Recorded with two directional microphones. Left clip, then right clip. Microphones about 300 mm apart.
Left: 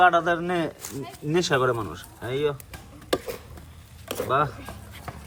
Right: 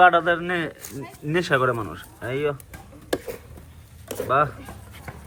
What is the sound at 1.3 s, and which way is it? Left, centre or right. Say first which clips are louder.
Speech: right 1 dB; centre.